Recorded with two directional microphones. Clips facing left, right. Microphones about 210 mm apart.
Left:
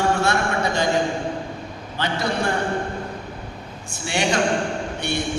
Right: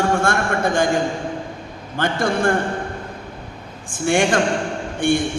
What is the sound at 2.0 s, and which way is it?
Speech, 50° right (ahead or behind).